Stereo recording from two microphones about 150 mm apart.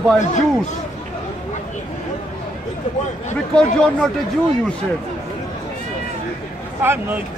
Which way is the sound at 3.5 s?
5° left (ahead or behind).